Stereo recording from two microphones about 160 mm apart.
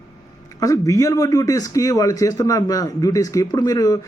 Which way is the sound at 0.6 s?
20° left (ahead or behind).